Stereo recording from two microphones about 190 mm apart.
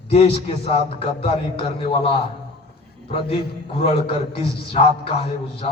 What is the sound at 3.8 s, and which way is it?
A man's voice, 30° left (ahead or behind).